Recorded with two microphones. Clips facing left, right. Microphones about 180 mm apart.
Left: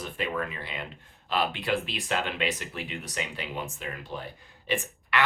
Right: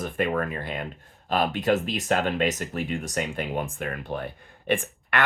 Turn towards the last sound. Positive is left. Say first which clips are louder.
# right 3 dB
turn(degrees=-55)  # may be behind; listen again after turning